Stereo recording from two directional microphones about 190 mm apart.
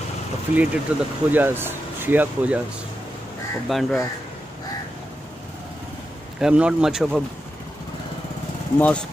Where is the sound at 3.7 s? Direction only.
Centre (ahead or behind).